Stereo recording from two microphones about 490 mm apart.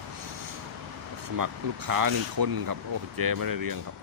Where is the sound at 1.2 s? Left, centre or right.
Right.